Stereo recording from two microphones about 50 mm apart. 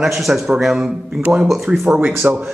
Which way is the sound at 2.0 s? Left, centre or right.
Right.